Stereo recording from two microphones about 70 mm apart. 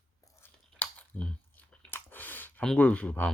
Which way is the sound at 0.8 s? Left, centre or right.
Centre.